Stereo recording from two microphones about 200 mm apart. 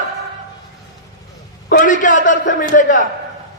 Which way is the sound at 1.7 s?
40° left (ahead or behind).